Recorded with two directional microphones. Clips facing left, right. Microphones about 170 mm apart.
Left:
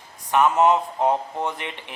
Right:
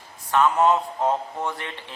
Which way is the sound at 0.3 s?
20° left (ahead or behind).